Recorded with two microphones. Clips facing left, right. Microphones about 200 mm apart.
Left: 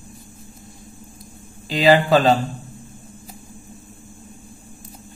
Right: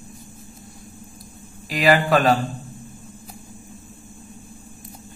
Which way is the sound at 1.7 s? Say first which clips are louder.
Left 3 dB; 25° left (ahead or behind).